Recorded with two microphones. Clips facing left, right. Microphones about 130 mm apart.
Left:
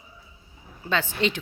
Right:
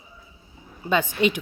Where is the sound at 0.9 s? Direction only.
15° right (ahead or behind).